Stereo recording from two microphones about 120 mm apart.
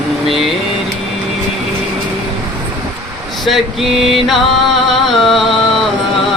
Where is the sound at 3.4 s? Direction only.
Centre (ahead or behind).